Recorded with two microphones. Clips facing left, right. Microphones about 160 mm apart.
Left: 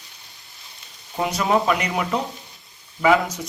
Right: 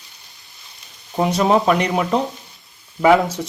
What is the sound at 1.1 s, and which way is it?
Speech, 25° right (ahead or behind).